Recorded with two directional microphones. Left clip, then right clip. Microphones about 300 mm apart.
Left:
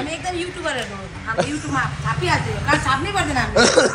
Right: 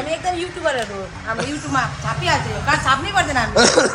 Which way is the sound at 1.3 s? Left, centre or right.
Centre.